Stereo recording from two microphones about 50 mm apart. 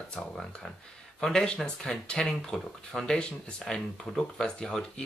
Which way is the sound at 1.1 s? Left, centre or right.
Centre.